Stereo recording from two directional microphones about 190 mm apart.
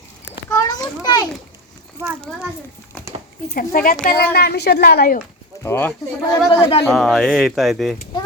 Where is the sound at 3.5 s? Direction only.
45° left (ahead or behind).